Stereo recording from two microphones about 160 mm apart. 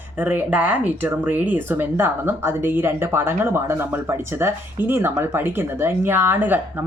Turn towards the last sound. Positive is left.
turn(degrees=-10)  # may be behind; listen again after turning